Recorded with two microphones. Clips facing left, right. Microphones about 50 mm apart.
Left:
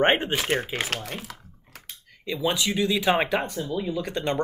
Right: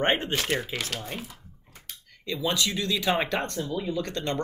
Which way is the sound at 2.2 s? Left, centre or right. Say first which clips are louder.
Left 2 dB; centre.